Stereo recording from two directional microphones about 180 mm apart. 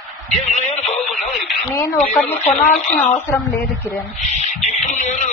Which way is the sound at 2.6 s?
45° left (ahead or behind).